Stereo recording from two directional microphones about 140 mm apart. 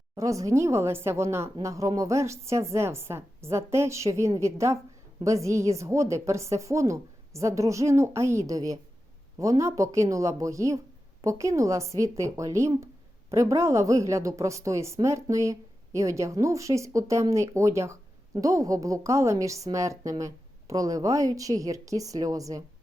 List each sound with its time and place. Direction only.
0.2 s a woman's voice: 20° right (ahead or behind)